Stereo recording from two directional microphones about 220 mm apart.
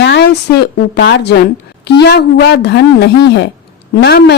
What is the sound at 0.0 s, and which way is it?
Speech, 50° left (ahead or behind).